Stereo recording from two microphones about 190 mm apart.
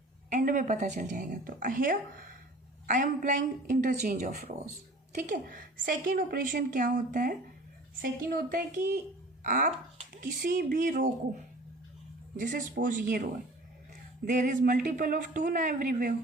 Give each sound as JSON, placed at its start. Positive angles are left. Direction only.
{"t": 0.3, "sound": "a woman's voice", "side_deg": -45}
{"t": 12.4, "sound": "a woman's voice", "side_deg": -45}
{"t": 14.3, "sound": "a woman's voice", "side_deg": -45}